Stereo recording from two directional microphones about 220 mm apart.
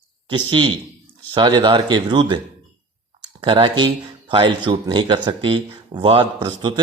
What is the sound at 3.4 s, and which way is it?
Speech, 20° right (ahead or behind).